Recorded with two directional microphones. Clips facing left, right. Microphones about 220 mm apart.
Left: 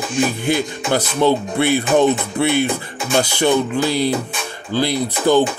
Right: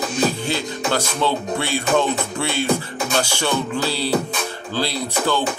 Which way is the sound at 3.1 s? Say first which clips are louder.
Left 6 dB; 15° left (ahead or behind).